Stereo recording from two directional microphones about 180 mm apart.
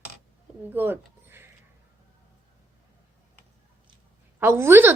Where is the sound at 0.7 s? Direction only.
10° right (ahead or behind).